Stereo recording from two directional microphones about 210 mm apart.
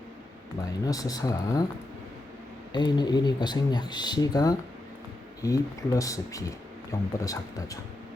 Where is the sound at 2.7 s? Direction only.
20° left (ahead or behind).